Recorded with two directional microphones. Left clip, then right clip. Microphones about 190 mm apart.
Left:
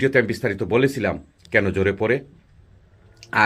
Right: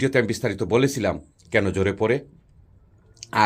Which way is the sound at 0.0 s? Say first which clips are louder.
Left 3 dB; 20° right (ahead or behind).